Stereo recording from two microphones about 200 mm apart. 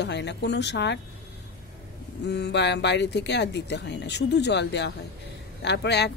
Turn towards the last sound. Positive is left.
turn(degrees=55)  # may be behind; listen again after turning